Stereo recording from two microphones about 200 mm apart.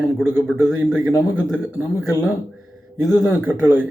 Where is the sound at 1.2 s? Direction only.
5° left (ahead or behind).